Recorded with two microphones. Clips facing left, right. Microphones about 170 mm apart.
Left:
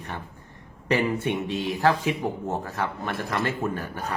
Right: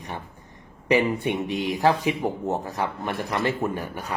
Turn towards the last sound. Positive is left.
turn(degrees=-15)  # may be behind; listen again after turning